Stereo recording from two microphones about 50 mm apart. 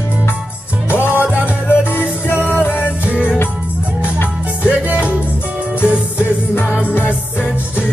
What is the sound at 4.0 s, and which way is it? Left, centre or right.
Music, left.